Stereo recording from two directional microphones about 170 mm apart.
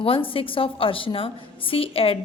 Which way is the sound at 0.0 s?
30° left (ahead or behind).